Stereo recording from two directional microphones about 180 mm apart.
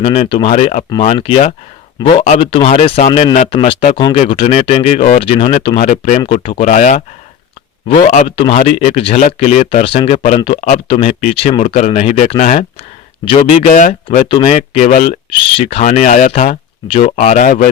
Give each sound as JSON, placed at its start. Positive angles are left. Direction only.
{"t": 0.0, "sound": "speech", "side_deg": 30}
{"t": 5.8, "sound": "speech", "side_deg": 45}
{"t": 14.3, "sound": "speech", "side_deg": 30}